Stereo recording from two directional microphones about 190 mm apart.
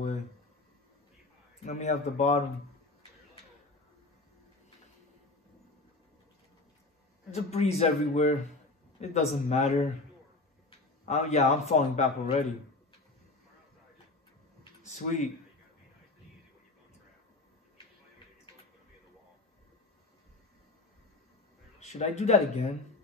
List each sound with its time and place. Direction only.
1.7 s a man's voice: 35° left (ahead or behind)
7.2 s a man's voice: 35° left (ahead or behind)
11.1 s a man's voice: 35° left (ahead or behind)
14.9 s a man's voice: 40° left (ahead or behind)
21.7 s a man's voice: 35° left (ahead or behind)